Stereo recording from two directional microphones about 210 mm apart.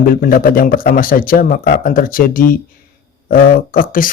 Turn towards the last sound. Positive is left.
turn(degrees=40)  # may be behind; listen again after turning